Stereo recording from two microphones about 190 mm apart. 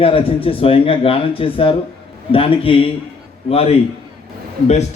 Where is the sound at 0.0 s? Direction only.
30° left (ahead or behind).